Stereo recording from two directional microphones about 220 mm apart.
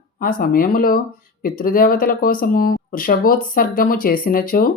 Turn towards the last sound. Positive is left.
turn(degrees=40)  # may be behind; listen again after turning